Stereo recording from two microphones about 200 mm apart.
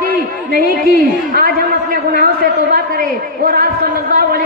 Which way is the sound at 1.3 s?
45° right (ahead or behind).